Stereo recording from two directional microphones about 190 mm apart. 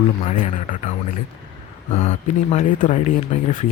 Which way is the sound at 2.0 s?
35° left (ahead or behind).